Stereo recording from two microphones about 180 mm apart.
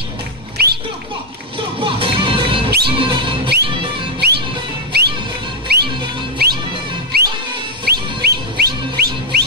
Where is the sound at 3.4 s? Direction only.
65° right (ahead or behind).